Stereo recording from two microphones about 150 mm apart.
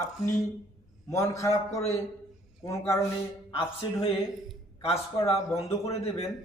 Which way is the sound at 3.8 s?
30° left (ahead or behind).